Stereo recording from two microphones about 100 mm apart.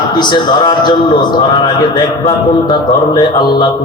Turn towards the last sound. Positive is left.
turn(degrees=45)  # may be behind; listen again after turning